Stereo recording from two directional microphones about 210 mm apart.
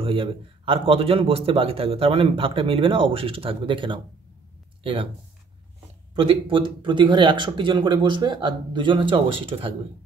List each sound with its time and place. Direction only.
0.0 s a man's voice: 25° right (ahead or behind)
6.1 s a man's voice: 25° right (ahead or behind)